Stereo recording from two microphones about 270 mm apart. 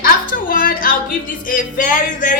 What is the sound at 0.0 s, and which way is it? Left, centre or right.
Music, left.